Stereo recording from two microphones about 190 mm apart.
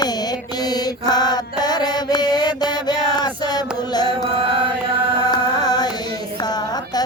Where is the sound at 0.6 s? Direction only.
20° left (ahead or behind).